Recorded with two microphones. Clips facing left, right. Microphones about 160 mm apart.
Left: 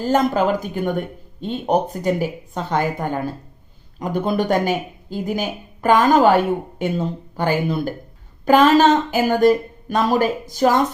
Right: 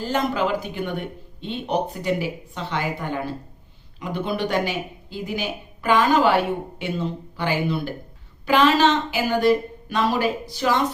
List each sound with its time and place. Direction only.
0.0 s speech: 45° left (ahead or behind)